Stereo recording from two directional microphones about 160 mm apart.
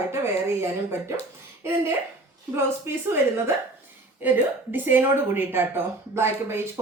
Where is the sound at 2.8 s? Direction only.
15° right (ahead or behind).